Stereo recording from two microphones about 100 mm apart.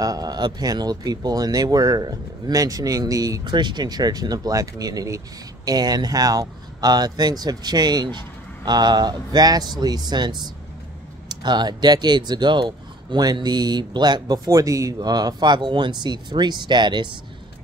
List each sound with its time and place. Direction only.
0.0 s speech: 40° right (ahead or behind)